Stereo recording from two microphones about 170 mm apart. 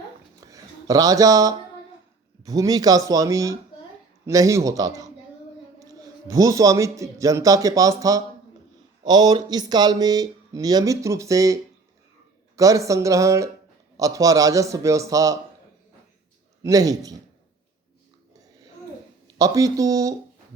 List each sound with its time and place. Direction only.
0.3 s a sound: 20° right (ahead or behind)
2.4 s speech: 20° right (ahead or behind)
16.6 s speech: 20° right (ahead or behind)
19.4 s speech: 20° right (ahead or behind)